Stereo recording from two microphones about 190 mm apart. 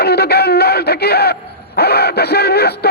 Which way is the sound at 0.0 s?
55° left (ahead or behind).